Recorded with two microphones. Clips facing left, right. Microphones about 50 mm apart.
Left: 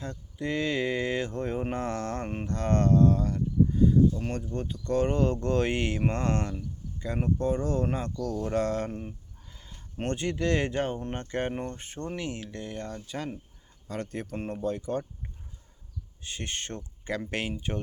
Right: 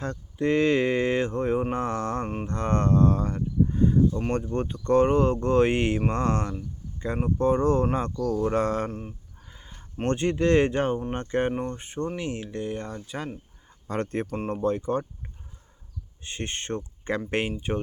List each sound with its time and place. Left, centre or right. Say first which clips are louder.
0.0 s speech: right 7 dB; right
1.7 s a sound: right 4 dB; right
2.2 s a sound: right 3 dB; centre
2.5 s livestock: even; right
3.8 s a sound: even; right
4.3 s speech: right 6 dB; right
7.9 s speech: right 5 dB; right
8.9 s speech: right 1 dB; centre
9.4 s a sound: right 3 dB; right
10.1 s speech: right 6 dB; right; by 13.4 s centre
13.8 s speech: right 6 dB; right
16.2 s speech: right 3 dB; right